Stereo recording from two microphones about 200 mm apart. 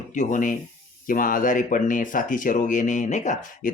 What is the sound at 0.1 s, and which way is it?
Speech, 40° left (ahead or behind).